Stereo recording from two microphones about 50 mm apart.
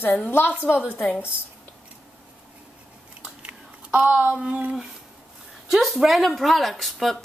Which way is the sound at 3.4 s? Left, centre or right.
Right.